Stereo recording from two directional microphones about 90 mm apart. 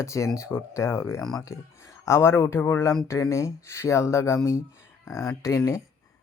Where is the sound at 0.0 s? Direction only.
35° left (ahead or behind).